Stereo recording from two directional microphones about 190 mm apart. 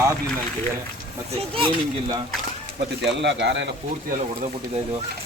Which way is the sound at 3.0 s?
65° right (ahead or behind).